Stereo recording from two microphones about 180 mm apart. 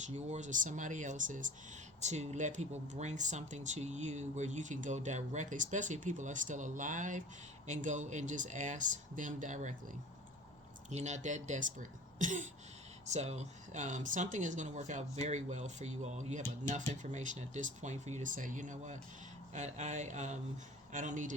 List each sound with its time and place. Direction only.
0.0 s speech: 40° right (ahead or behind)
10.8 s speech: 40° right (ahead or behind)
19.5 s a sound: 40° right (ahead or behind)
20.9 s speech: 45° right (ahead or behind)